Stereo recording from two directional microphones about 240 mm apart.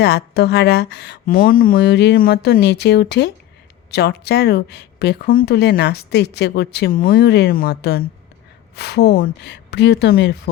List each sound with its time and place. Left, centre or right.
0.0 s speech: left